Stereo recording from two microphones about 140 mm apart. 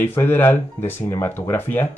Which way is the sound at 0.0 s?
15° left (ahead or behind).